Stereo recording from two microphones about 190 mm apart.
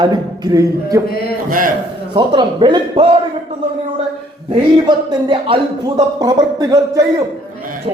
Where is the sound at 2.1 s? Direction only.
25° right (ahead or behind).